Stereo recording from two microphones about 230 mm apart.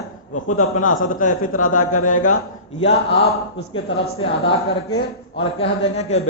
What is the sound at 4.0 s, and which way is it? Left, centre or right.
A man's voice, left.